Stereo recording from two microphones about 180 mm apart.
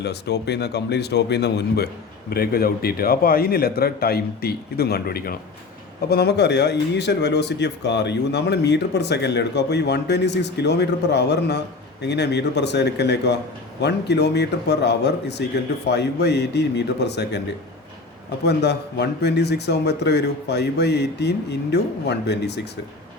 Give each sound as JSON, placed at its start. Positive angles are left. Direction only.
{"t": 0.0, "sound": "a man's voice", "side_deg": 70}
{"t": 18.4, "sound": "speech", "side_deg": 70}